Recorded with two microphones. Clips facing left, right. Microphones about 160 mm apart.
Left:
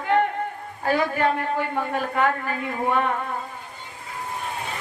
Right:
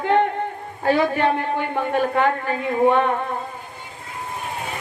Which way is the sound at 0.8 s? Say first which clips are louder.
Right 3 dB; 25° right (ahead or behind).